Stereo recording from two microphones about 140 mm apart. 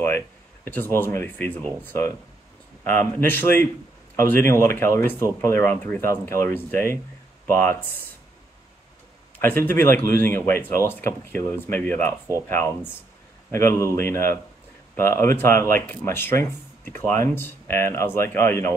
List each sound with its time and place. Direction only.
0.7 s speech: 15° left (ahead or behind)
9.4 s a man's voice: 15° left (ahead or behind)